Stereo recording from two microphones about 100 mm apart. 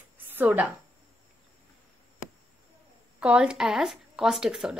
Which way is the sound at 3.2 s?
10° right (ahead or behind).